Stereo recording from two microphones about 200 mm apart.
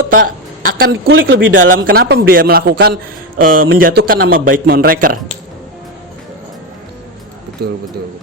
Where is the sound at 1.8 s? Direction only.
45° right (ahead or behind).